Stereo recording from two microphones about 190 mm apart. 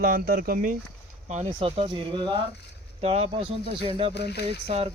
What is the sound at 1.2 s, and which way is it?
Speech, 35° right (ahead or behind).